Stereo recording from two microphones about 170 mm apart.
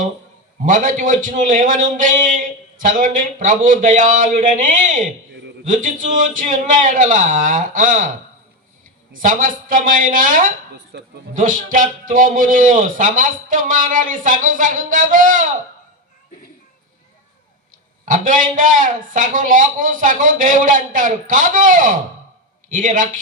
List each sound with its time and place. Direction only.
0.6 s a man's voice: 50° right (ahead or behind)
9.1 s a man's voice: 50° right (ahead or behind)
10.9 s speech: 90° right
11.3 s a man's voice: 50° right (ahead or behind)
18.0 s a man's voice: 50° right (ahead or behind)